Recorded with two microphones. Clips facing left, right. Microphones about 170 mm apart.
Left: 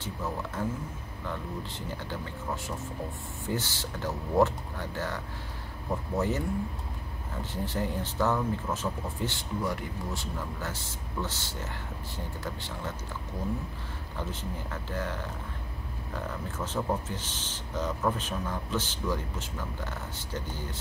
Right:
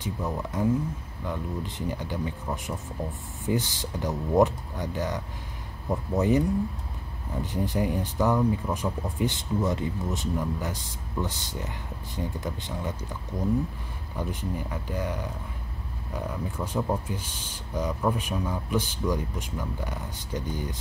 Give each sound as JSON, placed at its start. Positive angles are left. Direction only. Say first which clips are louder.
{"t": 0.0, "sound": "speech", "louder": "right 3 dB", "side_deg": -15}
{"t": 7.5, "sound": "speech", "louder": "right 5 dB", "side_deg": -15}
{"t": 14.1, "sound": "speech", "louder": "right 5 dB", "side_deg": -15}
{"t": 16.2, "sound": "speech", "louder": "right 4 dB", "side_deg": -10}